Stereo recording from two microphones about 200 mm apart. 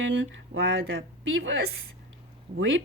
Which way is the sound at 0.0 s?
65° right (ahead or behind).